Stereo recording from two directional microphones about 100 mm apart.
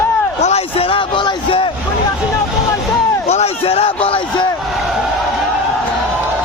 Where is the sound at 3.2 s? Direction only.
90° left; by 4.4 s 65° left (ahead or behind).